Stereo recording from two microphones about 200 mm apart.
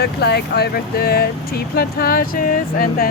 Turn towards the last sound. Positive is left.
turn(degrees=45)  # may be behind; listen again after turning